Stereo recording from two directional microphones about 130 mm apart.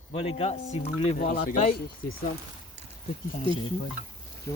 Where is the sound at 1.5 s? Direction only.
65° left (ahead or behind).